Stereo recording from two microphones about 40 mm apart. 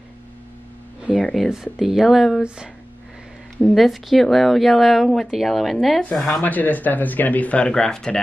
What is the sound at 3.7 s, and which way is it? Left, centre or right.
Speech, centre.